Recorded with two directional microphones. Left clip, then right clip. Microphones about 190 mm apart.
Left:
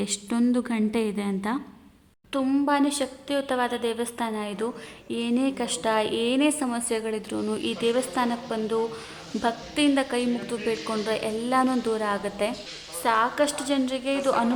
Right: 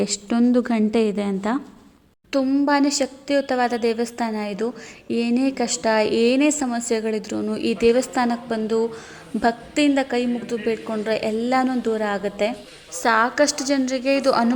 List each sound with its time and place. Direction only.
0.0 s a woman's voice: 5° right (ahead or behind)
2.3 s a woman's voice: 15° right (ahead or behind)